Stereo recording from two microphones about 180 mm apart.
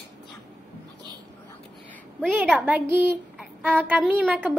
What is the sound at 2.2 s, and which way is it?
Speech, centre (ahead or behind).